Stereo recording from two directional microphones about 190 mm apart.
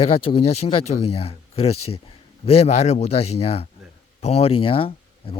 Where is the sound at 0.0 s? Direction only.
30° left (ahead or behind).